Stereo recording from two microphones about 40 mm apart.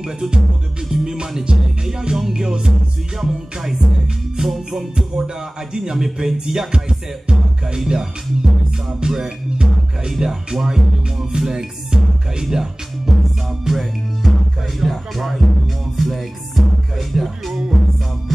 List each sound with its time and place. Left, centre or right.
0.0 s music: centre
4.4 s music: right
13.7 s music: centre
17.1 s speech: centre